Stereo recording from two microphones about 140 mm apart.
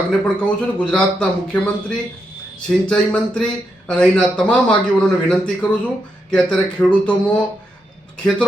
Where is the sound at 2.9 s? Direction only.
5° left (ahead or behind).